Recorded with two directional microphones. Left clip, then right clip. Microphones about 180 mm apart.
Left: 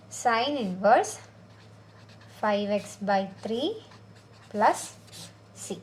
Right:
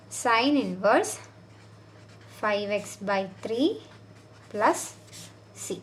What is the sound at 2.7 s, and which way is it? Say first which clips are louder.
A woman's voice: left 1 dB; 35° right (ahead or behind).